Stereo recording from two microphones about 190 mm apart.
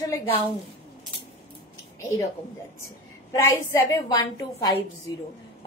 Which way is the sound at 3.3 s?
15° left (ahead or behind).